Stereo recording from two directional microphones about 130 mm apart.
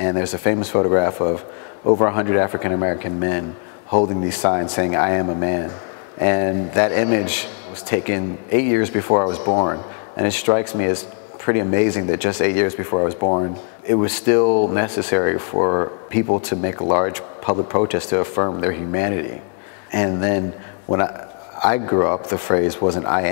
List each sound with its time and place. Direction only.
0.0 s speech: 25° left (ahead or behind)
9.1 s speech: 25° left (ahead or behind)
10.2 s speech: 15° left (ahead or behind)
12.9 s speech: 30° left (ahead or behind)
21.5 s speech: 20° left (ahead or behind)